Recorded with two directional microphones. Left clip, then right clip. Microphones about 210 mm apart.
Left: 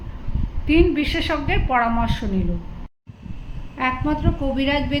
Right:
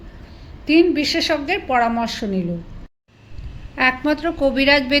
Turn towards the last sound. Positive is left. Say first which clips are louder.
# right 6 dB
turn(degrees=-40)  # may be behind; listen again after turning